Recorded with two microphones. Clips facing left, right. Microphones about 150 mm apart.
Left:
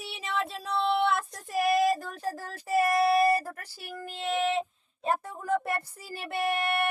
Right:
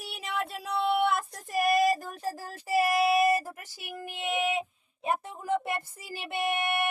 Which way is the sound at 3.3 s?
Centre (ahead or behind).